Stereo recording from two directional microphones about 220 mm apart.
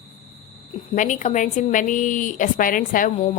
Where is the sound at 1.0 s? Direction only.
35° left (ahead or behind).